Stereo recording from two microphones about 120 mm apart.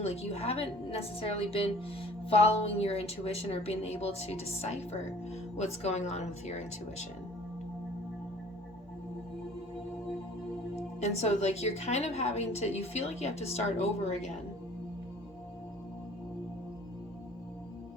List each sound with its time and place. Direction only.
0.0 s a woman's voice: 60° left (ahead or behind)
5.5 s speech: 65° left (ahead or behind)
11.0 s a woman's voice: 65° left (ahead or behind)